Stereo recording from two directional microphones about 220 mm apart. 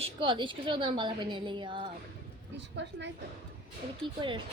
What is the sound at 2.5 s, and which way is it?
Speech, 55° right (ahead or behind).